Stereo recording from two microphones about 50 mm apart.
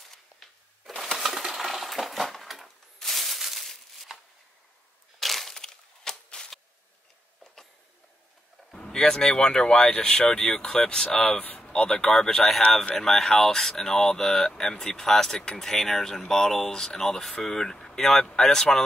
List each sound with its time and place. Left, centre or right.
0.1 s coin: centre
5.2 s crushing: centre
8.7 s speech: centre